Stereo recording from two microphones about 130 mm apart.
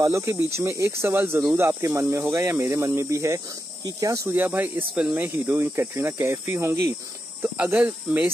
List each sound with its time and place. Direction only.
0.0 s speech: 20° right (ahead or behind)